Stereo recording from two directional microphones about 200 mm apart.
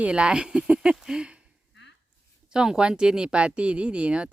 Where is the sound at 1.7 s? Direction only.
60° left (ahead or behind).